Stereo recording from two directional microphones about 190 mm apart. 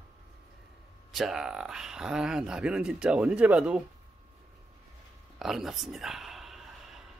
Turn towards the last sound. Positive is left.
turn(degrees=0)  # may be behind; listen again after turning